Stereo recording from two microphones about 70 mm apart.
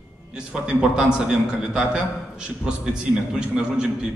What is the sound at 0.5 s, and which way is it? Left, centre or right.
A man's voice, centre.